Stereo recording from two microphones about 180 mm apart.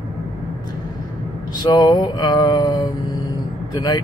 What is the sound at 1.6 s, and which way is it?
Speech, 25° left (ahead or behind).